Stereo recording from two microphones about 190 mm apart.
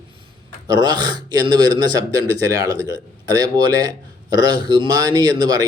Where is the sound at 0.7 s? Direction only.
20° right (ahead or behind).